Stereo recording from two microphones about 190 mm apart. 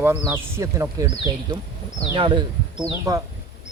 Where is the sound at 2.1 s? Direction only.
25° right (ahead or behind).